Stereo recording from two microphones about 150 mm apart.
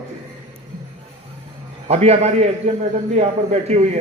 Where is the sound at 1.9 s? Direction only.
45° right (ahead or behind).